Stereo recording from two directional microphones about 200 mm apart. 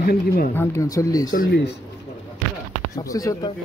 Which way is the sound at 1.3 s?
50° left (ahead or behind).